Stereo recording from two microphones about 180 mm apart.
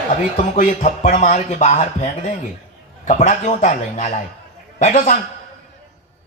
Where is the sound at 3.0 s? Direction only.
40° left (ahead or behind).